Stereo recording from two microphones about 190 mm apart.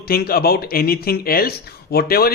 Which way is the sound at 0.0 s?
55° left (ahead or behind).